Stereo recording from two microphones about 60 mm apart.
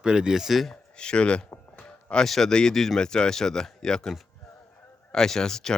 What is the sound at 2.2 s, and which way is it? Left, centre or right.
Speech, centre.